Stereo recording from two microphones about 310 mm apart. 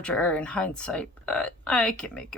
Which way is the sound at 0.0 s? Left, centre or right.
Centre.